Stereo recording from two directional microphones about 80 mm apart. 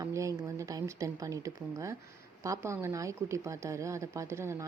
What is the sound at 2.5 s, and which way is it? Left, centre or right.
Speech, right.